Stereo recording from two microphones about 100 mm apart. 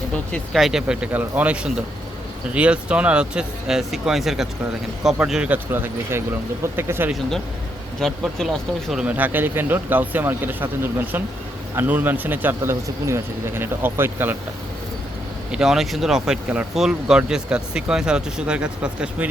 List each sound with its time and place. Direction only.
0.1 s speech: 10° left (ahead or behind)
0.5 s speech: 5° right (ahead or behind)
5.7 s speech: 25° right (ahead or behind)
7.1 s speech: 5° left (ahead or behind)
9.0 s speech: 15° right (ahead or behind)
15.5 s speech: 5° right (ahead or behind)